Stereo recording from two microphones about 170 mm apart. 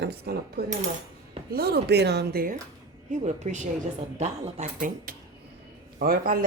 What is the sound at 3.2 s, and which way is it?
Speech, 45° right (ahead or behind).